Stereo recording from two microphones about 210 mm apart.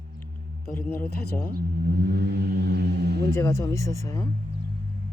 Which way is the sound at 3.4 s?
15° left (ahead or behind).